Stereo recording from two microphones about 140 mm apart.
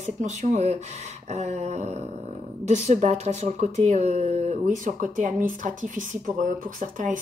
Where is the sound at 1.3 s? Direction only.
50° right (ahead or behind).